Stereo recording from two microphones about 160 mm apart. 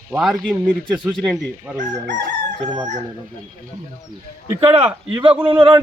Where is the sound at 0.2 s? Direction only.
Centre (ahead or behind).